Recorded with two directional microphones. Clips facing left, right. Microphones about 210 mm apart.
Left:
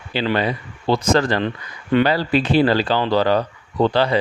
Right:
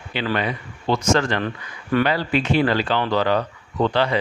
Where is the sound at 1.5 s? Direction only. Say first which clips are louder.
Left 3 dB; 20° left (ahead or behind).